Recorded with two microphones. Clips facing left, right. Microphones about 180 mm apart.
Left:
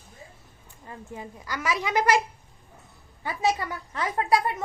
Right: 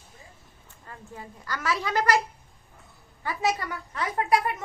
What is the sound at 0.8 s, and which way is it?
A woman's voice, 15° left (ahead or behind).